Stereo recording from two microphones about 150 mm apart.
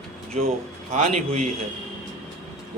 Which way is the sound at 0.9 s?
50° right (ahead or behind).